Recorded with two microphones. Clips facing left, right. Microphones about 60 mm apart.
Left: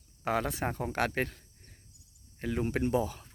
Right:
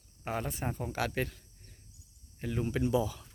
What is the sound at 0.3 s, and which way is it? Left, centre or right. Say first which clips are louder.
Speech: left 5 dB; left.